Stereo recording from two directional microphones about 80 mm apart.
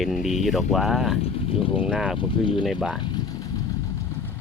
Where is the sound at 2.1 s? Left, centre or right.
Left.